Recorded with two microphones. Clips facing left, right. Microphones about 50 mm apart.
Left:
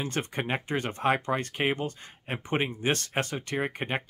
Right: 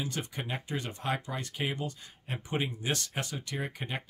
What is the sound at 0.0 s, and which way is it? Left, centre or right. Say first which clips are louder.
Speech: left 5 dB; left.